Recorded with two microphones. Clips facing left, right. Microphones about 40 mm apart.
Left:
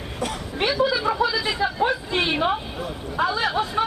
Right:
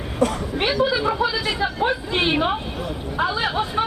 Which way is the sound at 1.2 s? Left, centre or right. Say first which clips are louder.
Even; right.